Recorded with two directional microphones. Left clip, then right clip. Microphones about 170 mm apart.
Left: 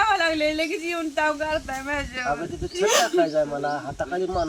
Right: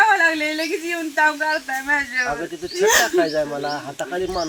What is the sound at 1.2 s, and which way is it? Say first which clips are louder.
Speech: right 6 dB; 20° left (ahead or behind).